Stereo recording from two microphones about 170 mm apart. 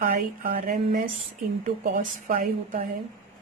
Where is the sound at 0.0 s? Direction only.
55° right (ahead or behind).